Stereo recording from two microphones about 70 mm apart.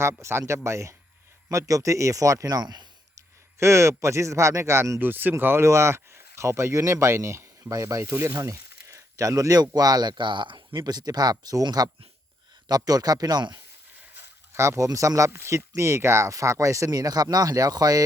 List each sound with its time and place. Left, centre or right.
0.0 s speech: right
1.5 s speech: right
3.6 s speech: right
4.9 s speech: right
5.6 s speech: right
14.5 s speech: right